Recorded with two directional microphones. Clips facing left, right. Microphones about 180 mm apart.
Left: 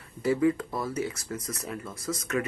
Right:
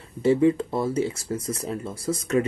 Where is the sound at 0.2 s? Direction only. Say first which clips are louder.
Right 5 dB; 25° right (ahead or behind).